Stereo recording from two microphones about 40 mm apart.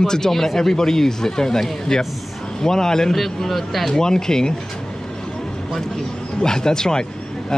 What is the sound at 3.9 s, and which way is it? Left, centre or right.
Speech, centre.